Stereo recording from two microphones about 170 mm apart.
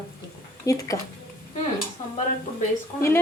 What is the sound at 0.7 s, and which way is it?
Speech, 20° left (ahead or behind).